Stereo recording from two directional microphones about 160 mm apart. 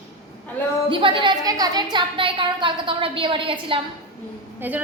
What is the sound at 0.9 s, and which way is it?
A woman's voice, 30° right (ahead or behind).